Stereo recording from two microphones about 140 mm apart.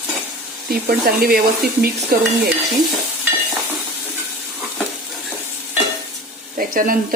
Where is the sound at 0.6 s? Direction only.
90° right.